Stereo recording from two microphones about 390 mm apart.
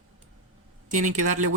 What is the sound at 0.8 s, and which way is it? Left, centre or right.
Speech, centre.